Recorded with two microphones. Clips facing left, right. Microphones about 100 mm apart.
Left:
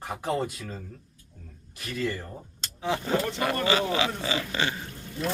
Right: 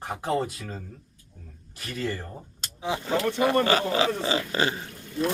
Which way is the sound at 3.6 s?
40° right (ahead or behind).